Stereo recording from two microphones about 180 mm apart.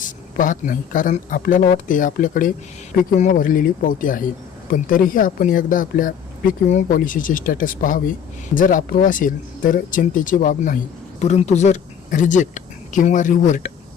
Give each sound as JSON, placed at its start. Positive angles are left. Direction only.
{"t": 0.0, "sound": "speech", "side_deg": 45}
{"t": 11.2, "sound": "speech", "side_deg": 40}